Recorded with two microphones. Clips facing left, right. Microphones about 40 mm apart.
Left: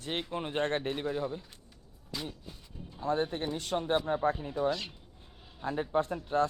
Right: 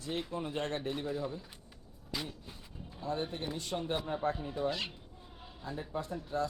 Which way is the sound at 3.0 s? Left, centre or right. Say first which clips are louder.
Left 6 dB; left.